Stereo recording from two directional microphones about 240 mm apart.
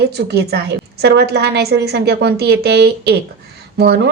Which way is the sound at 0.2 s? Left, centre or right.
Right.